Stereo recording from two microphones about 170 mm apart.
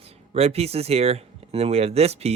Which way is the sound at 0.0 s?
35° right (ahead or behind).